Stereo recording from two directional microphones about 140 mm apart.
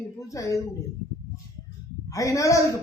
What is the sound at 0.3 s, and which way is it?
Speech, 20° left (ahead or behind).